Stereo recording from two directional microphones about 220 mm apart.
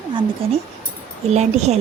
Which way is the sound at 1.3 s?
30° right (ahead or behind).